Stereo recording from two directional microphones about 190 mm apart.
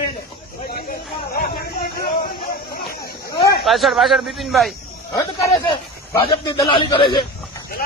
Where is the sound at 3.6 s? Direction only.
Centre (ahead or behind).